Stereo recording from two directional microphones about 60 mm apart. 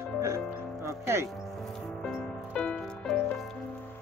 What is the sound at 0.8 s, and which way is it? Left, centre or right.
Music, right.